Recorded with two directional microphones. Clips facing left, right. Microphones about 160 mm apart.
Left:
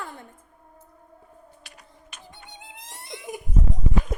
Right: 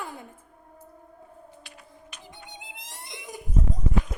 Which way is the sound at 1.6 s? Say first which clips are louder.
Right 2 dB; 50° left (ahead or behind).